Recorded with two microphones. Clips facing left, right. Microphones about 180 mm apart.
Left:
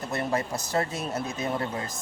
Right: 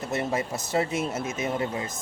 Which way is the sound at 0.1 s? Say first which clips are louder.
Even; 20° right (ahead or behind).